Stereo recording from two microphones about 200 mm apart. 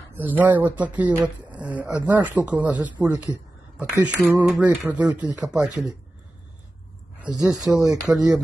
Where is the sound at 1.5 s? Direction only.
5° right (ahead or behind).